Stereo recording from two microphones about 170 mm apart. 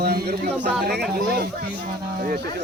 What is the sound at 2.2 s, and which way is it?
Speech, 60° right (ahead or behind).